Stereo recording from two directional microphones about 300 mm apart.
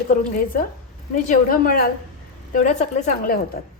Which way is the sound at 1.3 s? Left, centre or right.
Left.